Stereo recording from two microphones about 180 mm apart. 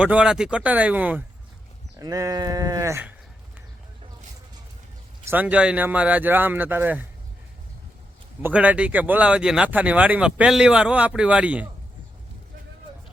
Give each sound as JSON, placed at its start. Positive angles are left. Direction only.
{"t": 0.0, "sound": "speech", "side_deg": -5}
{"t": 2.0, "sound": "sheep", "side_deg": -20}
{"t": 5.2, "sound": "speech", "side_deg": -10}
{"t": 8.4, "sound": "speech", "side_deg": -10}